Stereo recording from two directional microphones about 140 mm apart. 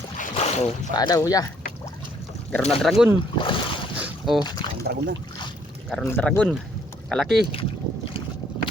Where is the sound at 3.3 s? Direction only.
40° left (ahead or behind).